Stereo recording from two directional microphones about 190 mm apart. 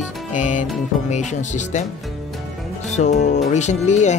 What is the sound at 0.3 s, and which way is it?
Music, 40° left (ahead or behind).